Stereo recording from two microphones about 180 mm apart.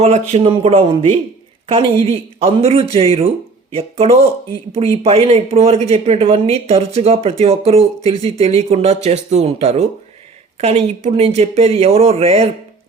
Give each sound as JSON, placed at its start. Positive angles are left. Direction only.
{"t": 0.0, "sound": "speech", "side_deg": -35}